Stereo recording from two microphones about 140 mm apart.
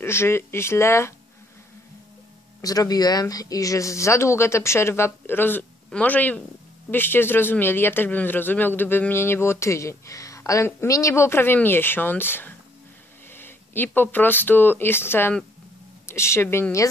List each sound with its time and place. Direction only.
0.0 s a man's voice: 20° left (ahead or behind)
2.6 s a man's voice: 25° left (ahead or behind)